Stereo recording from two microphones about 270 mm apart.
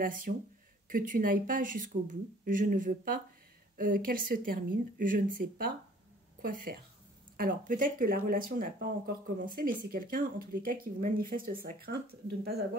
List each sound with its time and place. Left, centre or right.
0.0 s speech: right